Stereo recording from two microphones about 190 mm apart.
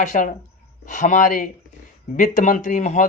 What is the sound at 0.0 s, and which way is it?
Speech, 40° left (ahead or behind).